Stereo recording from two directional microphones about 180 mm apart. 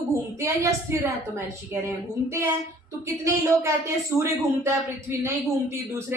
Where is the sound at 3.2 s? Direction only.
15° right (ahead or behind).